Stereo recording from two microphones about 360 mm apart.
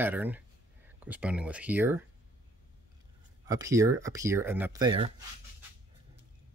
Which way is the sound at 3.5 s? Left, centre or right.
Centre.